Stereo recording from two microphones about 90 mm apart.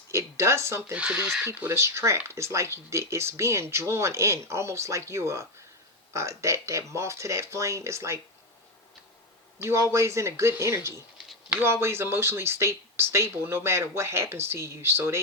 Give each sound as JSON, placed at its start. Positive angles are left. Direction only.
{"t": 0.1, "sound": "speech", "side_deg": -30}
{"t": 0.9, "sound": "speech", "side_deg": -15}
{"t": 1.5, "sound": "speech", "side_deg": -30}
{"t": 9.6, "sound": "speech", "side_deg": -30}